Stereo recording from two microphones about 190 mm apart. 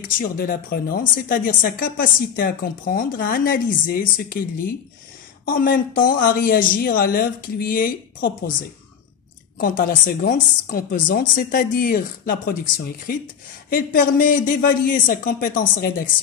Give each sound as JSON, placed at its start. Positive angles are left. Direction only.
{"t": 0.2, "sound": "speech", "side_deg": 50}
{"t": 9.6, "sound": "speech", "side_deg": 50}